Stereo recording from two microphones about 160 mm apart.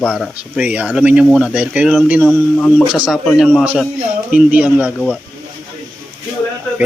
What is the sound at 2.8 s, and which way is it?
Speech, 5° right (ahead or behind).